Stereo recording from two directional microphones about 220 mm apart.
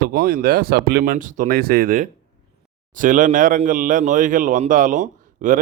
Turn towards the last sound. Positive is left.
turn(degrees=-35)  # may be behind; listen again after turning